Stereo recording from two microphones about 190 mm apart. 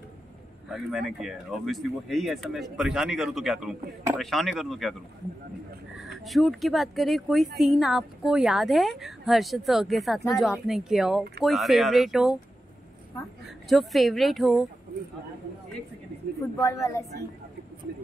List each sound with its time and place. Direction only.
0.7 s speech: centre (ahead or behind)
5.9 s speech: centre (ahead or behind)
13.7 s speech: centre (ahead or behind)
16.5 s speech: 15° left (ahead or behind)